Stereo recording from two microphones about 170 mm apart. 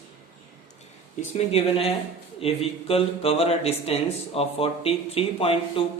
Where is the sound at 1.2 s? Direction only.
40° left (ahead or behind).